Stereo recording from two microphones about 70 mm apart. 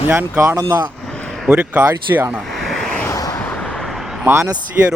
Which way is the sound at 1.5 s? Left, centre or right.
Centre.